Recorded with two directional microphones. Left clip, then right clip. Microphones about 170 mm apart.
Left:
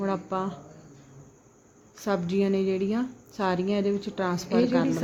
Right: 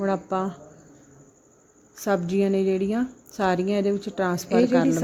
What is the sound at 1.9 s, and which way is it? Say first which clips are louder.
A woman's voice: right 4 dB; 30° right (ahead or behind).